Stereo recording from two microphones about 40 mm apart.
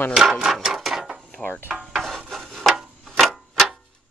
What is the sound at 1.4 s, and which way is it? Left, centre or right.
Stir, left.